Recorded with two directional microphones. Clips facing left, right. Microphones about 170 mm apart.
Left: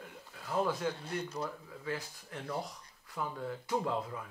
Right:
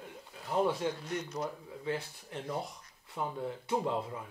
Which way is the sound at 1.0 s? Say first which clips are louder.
Right 1 dB; 30° left (ahead or behind).